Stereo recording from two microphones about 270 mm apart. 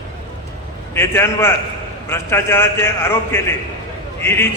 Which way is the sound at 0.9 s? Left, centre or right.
Centre.